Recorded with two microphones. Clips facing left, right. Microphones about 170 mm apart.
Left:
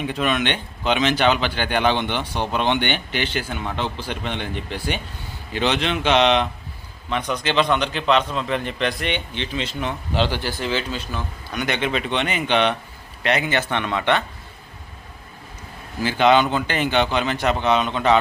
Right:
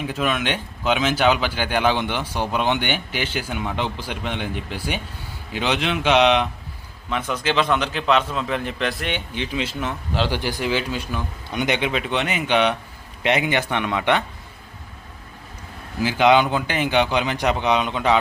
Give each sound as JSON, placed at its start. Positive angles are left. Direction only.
{"t": 0.0, "sound": "a man's voice", "side_deg": -5}
{"t": 11.9, "sound": "a man's voice", "side_deg": -5}
{"t": 16.0, "sound": "speech", "side_deg": -10}